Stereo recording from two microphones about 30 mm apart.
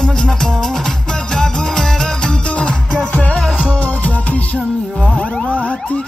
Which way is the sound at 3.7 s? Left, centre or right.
Left.